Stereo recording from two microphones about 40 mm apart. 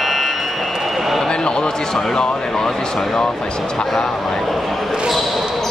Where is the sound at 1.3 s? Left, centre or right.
Left.